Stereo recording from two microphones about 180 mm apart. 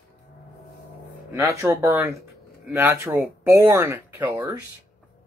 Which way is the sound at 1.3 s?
15° right (ahead or behind).